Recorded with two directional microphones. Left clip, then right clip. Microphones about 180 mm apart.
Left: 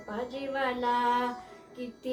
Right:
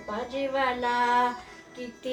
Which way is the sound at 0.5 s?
20° left (ahead or behind).